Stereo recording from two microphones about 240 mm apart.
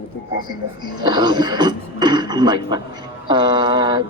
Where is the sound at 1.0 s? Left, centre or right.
Centre.